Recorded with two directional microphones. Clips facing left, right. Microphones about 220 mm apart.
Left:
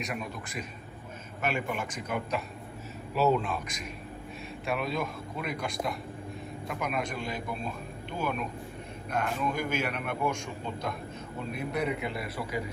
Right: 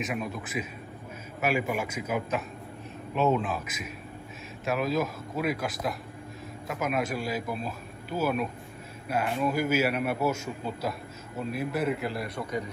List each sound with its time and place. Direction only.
0.0 s a man's voice: centre (ahead or behind)
11.5 s a man's voice: centre (ahead or behind)